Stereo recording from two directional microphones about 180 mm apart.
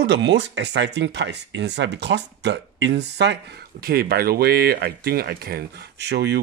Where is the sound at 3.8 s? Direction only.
60° right (ahead or behind).